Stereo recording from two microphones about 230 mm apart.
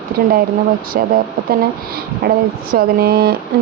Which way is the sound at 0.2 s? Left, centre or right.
Right.